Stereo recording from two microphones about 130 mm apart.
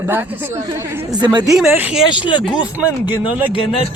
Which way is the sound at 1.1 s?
35° right (ahead or behind).